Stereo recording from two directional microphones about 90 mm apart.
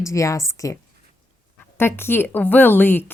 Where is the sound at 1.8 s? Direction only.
25° left (ahead or behind).